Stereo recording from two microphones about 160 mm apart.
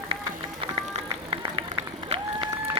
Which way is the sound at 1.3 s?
35° right (ahead or behind).